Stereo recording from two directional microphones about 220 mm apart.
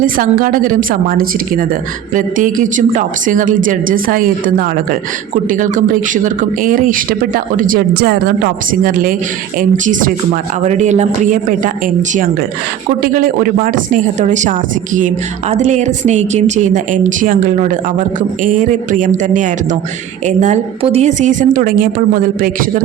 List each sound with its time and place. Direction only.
0.0 s speech: 40° right (ahead or behind)